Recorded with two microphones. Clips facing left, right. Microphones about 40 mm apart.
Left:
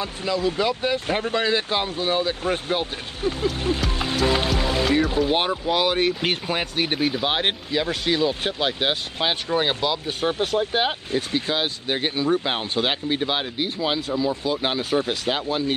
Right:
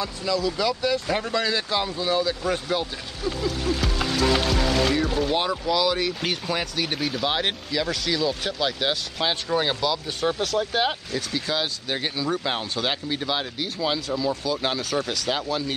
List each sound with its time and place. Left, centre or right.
0.0 s speech: left
4.2 s music: left
5.3 s speech: left